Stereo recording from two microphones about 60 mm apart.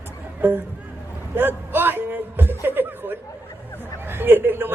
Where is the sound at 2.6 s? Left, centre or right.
Right.